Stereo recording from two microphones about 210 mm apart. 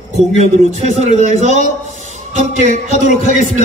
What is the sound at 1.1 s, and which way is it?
A man's voice, 35° right (ahead or behind).